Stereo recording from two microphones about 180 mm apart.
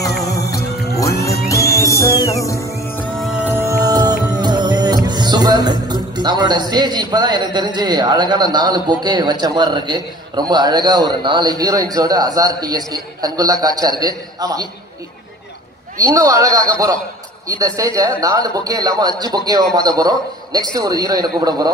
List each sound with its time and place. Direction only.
0.9 s music: 20° left (ahead or behind)
3.0 s music: centre (ahead or behind); by 8.9 s 25° right (ahead or behind)
9.0 s a man's voice: 25° right (ahead or behind)
16.0 s a man's voice: 20° right (ahead or behind)